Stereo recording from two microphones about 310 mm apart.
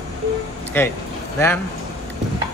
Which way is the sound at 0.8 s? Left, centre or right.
Centre.